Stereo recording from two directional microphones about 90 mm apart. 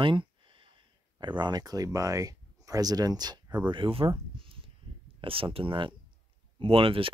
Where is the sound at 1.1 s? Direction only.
55° right (ahead or behind).